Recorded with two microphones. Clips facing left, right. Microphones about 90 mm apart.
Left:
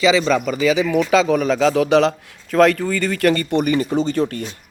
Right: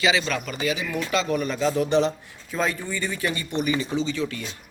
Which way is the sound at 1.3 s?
90° left.